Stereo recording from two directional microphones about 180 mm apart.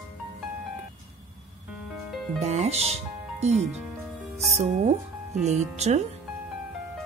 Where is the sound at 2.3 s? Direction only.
40° right (ahead or behind).